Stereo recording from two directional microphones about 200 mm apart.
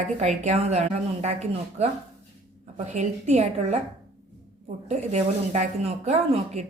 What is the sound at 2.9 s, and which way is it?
Speech, 35° right (ahead or behind).